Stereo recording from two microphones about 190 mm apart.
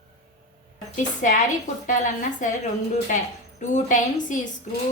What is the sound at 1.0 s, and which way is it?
A woman's voice, 45° left (ahead or behind).